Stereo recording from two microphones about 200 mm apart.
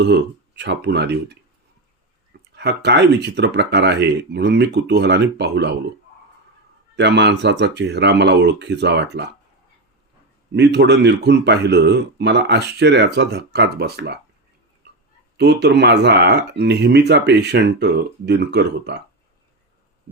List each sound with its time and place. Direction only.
0.0 s speech: 55° right (ahead or behind)
2.6 s speech: 60° right (ahead or behind)
6.9 s speech: 60° right (ahead or behind)
10.5 s speech: 55° right (ahead or behind)
15.4 s speech: 55° right (ahead or behind)